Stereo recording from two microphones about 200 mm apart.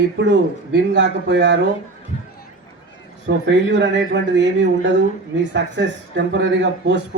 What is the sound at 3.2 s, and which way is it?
Speech, 65° right (ahead or behind).